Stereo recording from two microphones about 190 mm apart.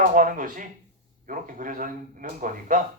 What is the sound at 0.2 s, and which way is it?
Speech, 45° right (ahead or behind).